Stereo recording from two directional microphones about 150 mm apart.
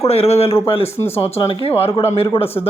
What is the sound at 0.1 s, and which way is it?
Speech, 45° left (ahead or behind).